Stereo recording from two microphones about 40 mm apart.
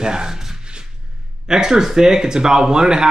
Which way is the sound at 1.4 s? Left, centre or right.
Centre.